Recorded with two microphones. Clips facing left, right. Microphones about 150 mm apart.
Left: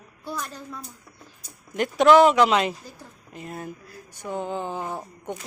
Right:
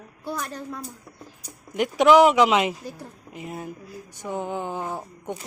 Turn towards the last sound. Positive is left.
turn(degrees=-10)  # may be behind; listen again after turning